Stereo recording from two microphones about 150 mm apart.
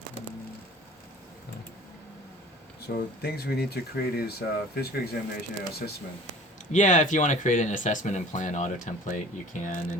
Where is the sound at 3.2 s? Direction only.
90° left.